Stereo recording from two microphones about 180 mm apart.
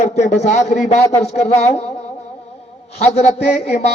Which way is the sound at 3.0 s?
35° left (ahead or behind).